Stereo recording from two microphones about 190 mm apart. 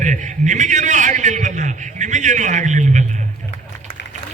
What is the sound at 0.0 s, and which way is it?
A man's voice, 40° right (ahead or behind).